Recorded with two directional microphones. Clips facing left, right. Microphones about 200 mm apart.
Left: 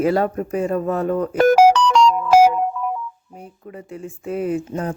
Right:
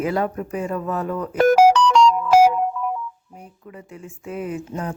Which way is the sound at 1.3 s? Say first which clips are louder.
Left 1 dB; 90° left.